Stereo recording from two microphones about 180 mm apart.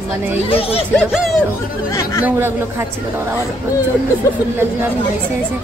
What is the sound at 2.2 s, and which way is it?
A woman's voice, 10° right (ahead or behind).